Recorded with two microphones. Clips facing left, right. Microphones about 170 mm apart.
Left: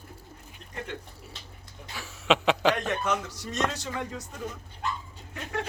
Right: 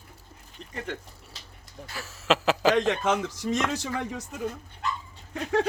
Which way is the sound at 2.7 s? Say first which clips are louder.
Right 5 dB; 90° right.